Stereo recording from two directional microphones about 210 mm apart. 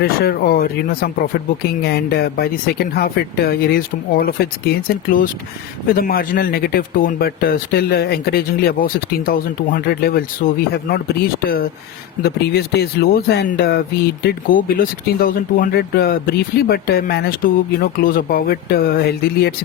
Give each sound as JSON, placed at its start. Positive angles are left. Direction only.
{"t": 0.0, "sound": "speech", "side_deg": 45}